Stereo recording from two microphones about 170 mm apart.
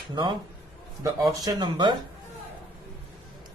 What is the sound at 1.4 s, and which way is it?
Speech, 25° right (ahead or behind).